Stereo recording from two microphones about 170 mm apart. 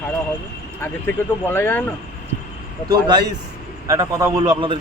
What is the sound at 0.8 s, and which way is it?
Speech, 15° left (ahead or behind).